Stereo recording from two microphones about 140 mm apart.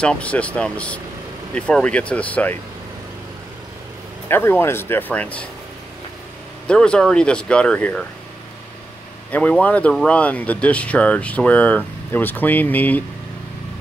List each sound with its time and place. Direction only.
0.0 s speech: 10° left (ahead or behind)
4.3 s speech: 15° left (ahead or behind)
6.7 s speech: 5° left (ahead or behind)
9.3 s speech: 10° left (ahead or behind)